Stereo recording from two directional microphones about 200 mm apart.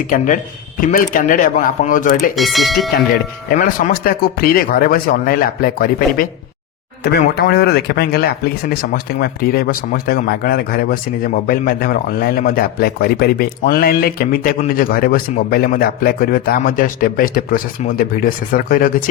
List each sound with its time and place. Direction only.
0.8 s speech: 45° left (ahead or behind)
2.3 s speech: centre (ahead or behind)
3.6 s speech: 45° left (ahead or behind)